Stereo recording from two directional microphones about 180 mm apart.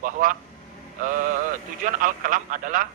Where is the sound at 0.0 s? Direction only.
50° right (ahead or behind).